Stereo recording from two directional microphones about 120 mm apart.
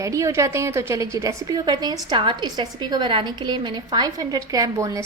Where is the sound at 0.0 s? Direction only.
25° right (ahead or behind).